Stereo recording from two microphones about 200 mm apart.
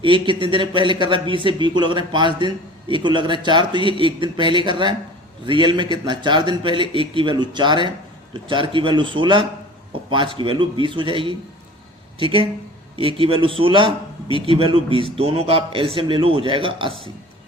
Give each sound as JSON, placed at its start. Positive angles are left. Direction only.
{"t": 0.0, "sound": "speech", "side_deg": -25}